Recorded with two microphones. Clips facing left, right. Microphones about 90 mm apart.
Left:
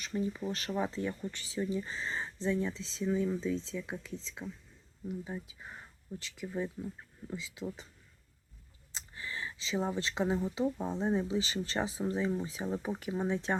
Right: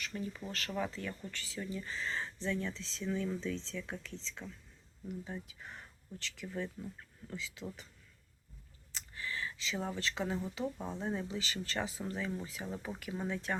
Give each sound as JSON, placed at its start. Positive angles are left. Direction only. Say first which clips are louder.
{"t": 0.0, "sound": "speech", "louder": "left 6 dB", "side_deg": 20}
{"t": 8.9, "sound": "speech", "louder": "even", "side_deg": 20}